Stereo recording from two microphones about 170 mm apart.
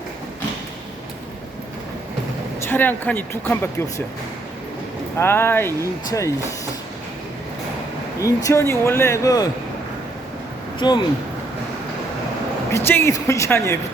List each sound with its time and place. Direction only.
2.6 s speech: 10° left (ahead or behind)
5.1 s speech: 15° left (ahead or behind)
8.2 s speech: 20° left (ahead or behind)
10.8 s speech: 30° left (ahead or behind)
12.7 s speech: 15° left (ahead or behind)